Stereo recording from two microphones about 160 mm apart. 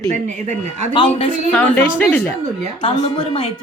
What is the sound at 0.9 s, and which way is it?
Speech, 30° left (ahead or behind).